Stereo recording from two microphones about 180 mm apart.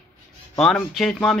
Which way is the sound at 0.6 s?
5° left (ahead or behind).